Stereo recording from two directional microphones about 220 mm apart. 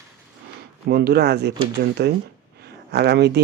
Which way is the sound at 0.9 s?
45° right (ahead or behind).